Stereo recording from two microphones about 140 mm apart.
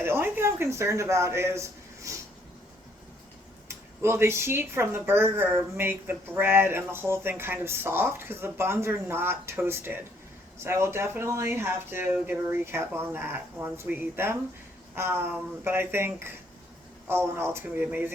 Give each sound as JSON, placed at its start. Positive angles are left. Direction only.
{"t": 0.0, "sound": "speech", "side_deg": -15}
{"t": 4.0, "sound": "speech", "side_deg": -20}